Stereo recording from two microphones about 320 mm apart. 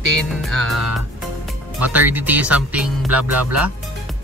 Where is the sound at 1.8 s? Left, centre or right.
Centre.